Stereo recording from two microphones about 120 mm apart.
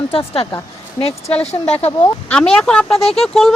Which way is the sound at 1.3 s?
10° left (ahead or behind).